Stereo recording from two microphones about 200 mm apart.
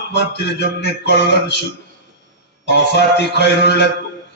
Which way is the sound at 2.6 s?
55° left (ahead or behind).